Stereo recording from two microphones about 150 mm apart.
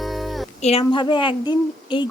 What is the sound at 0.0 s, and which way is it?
Music, centre (ahead or behind).